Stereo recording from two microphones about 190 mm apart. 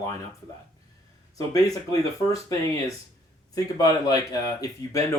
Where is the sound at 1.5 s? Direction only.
20° left (ahead or behind).